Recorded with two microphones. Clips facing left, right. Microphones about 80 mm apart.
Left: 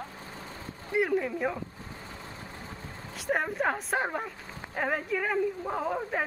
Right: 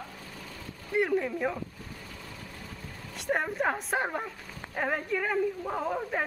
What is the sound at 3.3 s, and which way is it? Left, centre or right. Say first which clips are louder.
A woman's voice: even; centre.